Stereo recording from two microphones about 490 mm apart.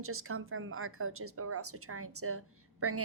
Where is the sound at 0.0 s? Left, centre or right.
Right.